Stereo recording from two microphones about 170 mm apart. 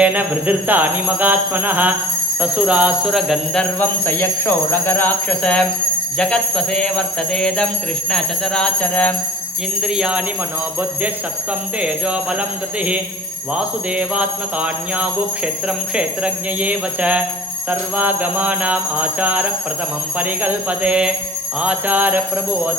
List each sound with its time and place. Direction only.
0.0 s jingle bell: 10° right (ahead or behind)
8.1 s alarm: 5° left (ahead or behind)
9.8 s jingle bell: 5° right (ahead or behind)
11.8 s jingle bell: 5° right (ahead or behind)